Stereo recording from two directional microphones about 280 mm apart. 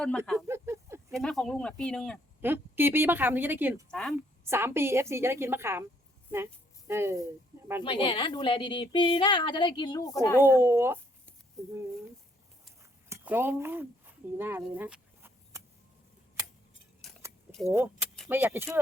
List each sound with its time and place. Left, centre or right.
0.3 s a sound: centre
1.1 s speech: centre
2.4 s a woman's voice: centre
7.8 s speech: centre
10.4 s a woman's voice: centre
13.2 s speech: centre
17.0 s keys jangling: centre